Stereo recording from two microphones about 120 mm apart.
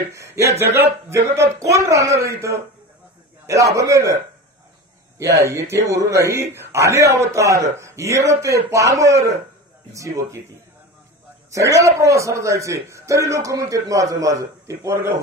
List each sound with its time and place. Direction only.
0.1 s a man's voice: 25° right (ahead or behind)
5.2 s a man's voice: 25° right (ahead or behind)
11.5 s a man's voice: 25° right (ahead or behind)